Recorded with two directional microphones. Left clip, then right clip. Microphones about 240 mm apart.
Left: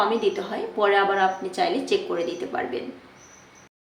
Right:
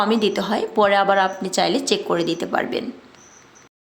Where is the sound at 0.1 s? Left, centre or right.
Right.